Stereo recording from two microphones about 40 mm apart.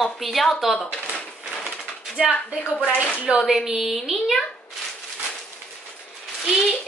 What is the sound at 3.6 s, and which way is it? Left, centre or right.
Speech, centre.